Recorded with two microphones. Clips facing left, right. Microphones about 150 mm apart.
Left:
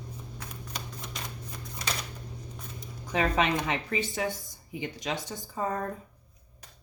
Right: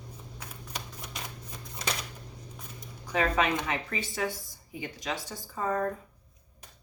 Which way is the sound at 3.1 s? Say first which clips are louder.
Left 1 dB; 20° left (ahead or behind).